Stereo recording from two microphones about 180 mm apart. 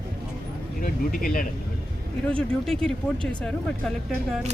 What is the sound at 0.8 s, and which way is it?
Speech, 50° left (ahead or behind).